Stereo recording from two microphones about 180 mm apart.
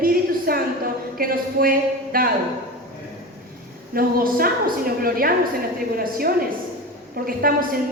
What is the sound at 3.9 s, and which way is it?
A woman's voice, 55° right (ahead or behind).